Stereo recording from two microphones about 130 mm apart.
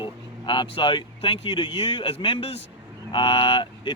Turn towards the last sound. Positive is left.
turn(degrees=40)  # may be behind; listen again after turning